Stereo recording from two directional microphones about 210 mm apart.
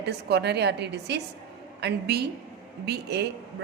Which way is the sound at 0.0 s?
50° right (ahead or behind).